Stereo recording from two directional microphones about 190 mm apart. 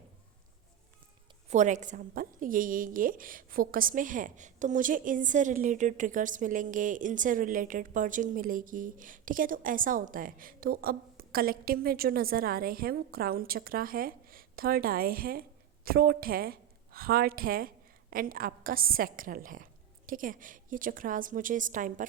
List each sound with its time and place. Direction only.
1.5 s a woman's voice: 40° right (ahead or behind)